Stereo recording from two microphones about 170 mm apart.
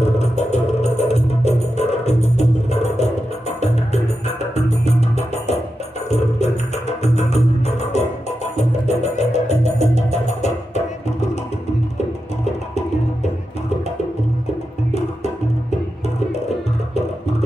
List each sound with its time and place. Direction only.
0.2 s music: 40° left (ahead or behind)